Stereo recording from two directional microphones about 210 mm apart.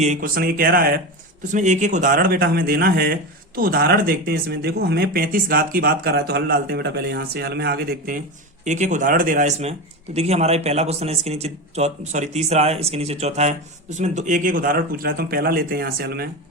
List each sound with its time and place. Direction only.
0.0 s speech: 40° right (ahead or behind)